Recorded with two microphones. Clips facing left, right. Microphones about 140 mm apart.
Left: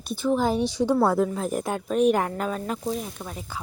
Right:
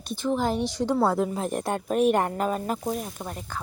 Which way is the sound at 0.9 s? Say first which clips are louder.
Left 1 dB; 5° right (ahead or behind).